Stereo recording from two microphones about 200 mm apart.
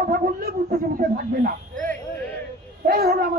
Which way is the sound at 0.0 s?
45° right (ahead or behind).